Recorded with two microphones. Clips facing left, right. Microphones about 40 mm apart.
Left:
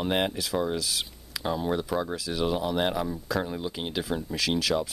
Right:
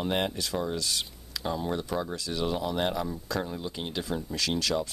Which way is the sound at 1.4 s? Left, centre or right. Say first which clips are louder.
Left 3 dB; centre.